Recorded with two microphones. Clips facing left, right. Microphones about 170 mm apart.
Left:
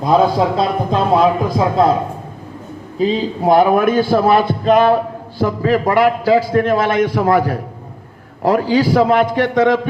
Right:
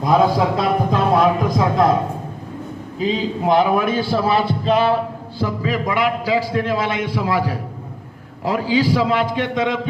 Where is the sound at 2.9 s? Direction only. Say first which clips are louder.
Left 4 dB; 40° left (ahead or behind).